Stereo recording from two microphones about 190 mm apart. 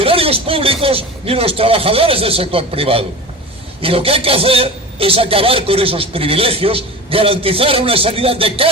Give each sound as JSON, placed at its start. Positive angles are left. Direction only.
{"t": 0.0, "sound": "a man's voice", "side_deg": -30}